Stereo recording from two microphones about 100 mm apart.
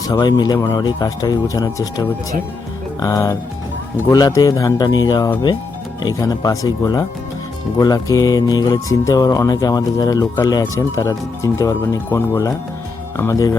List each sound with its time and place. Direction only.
0.1 s speech: 45° left (ahead or behind)